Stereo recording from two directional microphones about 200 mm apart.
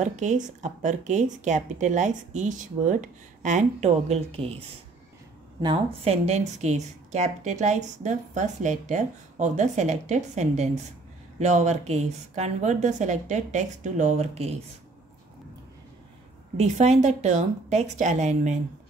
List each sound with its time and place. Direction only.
0.0 s speech: 35° right (ahead or behind)
16.5 s speech: 35° right (ahead or behind)